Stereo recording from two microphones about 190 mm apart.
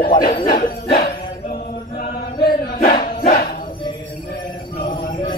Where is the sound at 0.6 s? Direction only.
50° left (ahead or behind).